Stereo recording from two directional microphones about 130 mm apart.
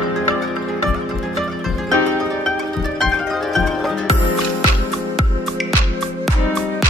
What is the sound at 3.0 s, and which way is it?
Music, centre (ahead or behind).